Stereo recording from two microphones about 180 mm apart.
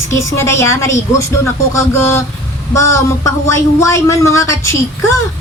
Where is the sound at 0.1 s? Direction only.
15° left (ahead or behind).